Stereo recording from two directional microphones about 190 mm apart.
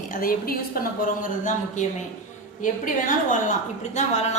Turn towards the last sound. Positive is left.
turn(degrees=35)  # may be behind; listen again after turning